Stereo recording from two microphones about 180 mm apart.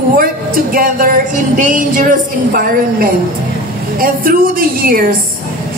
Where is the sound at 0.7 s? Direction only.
50° right (ahead or behind).